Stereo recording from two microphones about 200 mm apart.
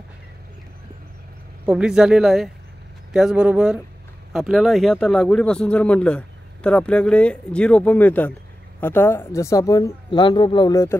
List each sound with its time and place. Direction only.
1.7 s speech: 5° right (ahead or behind); by 11.0 s 15° left (ahead or behind)